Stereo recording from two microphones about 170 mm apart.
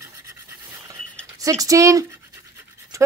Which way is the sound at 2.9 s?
20° right (ahead or behind).